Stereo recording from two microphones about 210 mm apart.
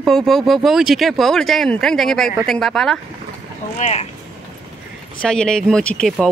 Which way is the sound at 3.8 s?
30° left (ahead or behind).